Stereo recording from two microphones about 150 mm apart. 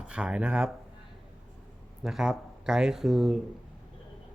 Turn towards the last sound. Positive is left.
turn(degrees=0)  # may be behind; listen again after turning